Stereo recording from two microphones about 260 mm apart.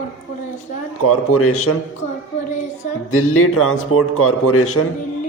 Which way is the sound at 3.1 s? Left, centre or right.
Left.